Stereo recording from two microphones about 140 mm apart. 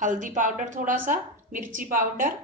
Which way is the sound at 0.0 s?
60° right (ahead or behind).